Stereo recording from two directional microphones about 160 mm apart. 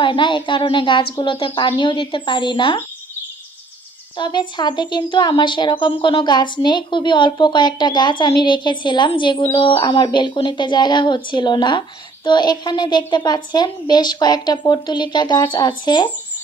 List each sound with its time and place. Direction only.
0.0 s a woman's voice: 30° left (ahead or behind)
4.2 s speech: 30° left (ahead or behind)